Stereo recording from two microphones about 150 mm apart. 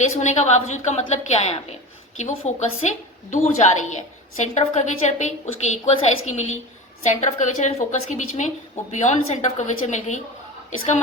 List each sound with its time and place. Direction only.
0.0 s a woman's voice: 50° left (ahead or behind)